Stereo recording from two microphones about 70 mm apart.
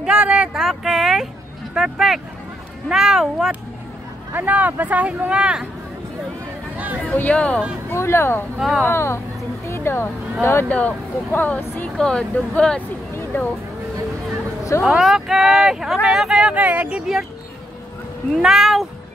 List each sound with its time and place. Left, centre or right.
0.0 s speech: centre
4.3 s speech: right
7.0 s speech: centre
7.9 s speech: left
8.5 s speech: centre
8.8 s speech: left
10.7 s speech: left
12.0 s speech: centre
13.1 s a sound: left
14.8 s speech: centre; by 17.0 s right
18.4 s speech: centre